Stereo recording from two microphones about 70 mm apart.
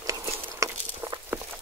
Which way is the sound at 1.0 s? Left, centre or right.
Right.